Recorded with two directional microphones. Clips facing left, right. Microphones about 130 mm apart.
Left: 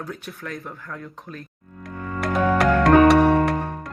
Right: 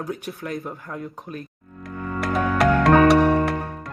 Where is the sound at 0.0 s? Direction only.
20° right (ahead or behind).